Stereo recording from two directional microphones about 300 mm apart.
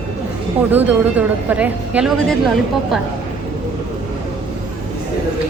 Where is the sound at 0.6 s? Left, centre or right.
Centre.